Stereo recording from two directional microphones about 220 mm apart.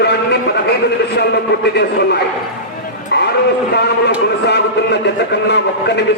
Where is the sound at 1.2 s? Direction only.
50° left (ahead or behind).